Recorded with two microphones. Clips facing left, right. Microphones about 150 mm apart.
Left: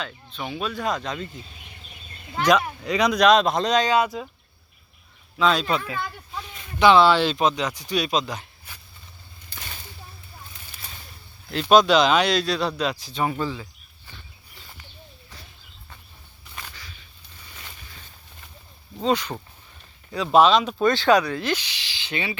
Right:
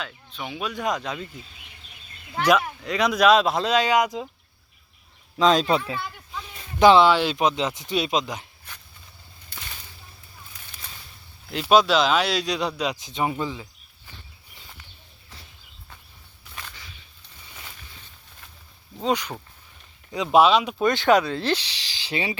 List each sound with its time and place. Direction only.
0.0 s speech: 5° right (ahead or behind)
2.4 s speech: 5° right (ahead or behind)
5.4 s speech: 40° right (ahead or behind)
6.5 s a sound: 35° right (ahead or behind)
6.9 s speech: 15° right (ahead or behind)
7.5 s speech: 25° right (ahead or behind)
11.4 s speech: 5° right (ahead or behind)
19.0 s speech: 15° right (ahead or behind); by 22.3 s 35° right (ahead or behind)